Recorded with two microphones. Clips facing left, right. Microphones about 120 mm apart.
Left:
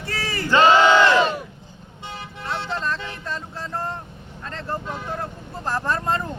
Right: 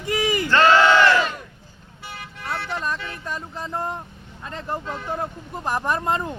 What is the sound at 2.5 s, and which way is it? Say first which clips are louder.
Vehicle: left 1 dB; 25° left (ahead or behind).